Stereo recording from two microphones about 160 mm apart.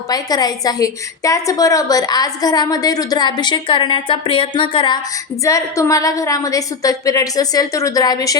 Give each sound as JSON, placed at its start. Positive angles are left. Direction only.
{"t": 0.1, "sound": "a woman's voice", "side_deg": 25}
{"t": 5.5, "sound": "a woman's voice", "side_deg": 20}